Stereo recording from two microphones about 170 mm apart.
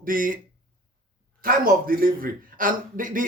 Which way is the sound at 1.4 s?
55° right (ahead or behind).